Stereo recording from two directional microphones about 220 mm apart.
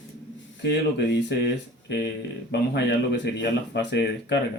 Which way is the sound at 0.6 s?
50° left (ahead or behind).